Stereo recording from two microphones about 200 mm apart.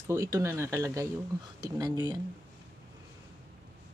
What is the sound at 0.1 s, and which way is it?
Speech, 15° right (ahead or behind).